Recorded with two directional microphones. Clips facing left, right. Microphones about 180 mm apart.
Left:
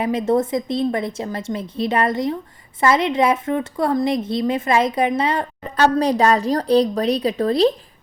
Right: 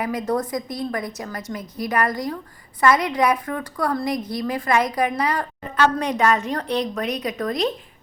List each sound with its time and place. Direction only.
0.0 s a woman's voice: 25° left (ahead or behind)